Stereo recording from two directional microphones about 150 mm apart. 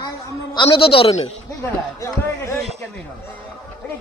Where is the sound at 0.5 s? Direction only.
35° left (ahead or behind).